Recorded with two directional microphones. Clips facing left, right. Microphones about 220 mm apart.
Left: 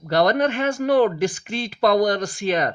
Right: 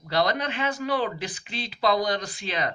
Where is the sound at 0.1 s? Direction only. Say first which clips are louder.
Left 7 dB; 50° left (ahead or behind).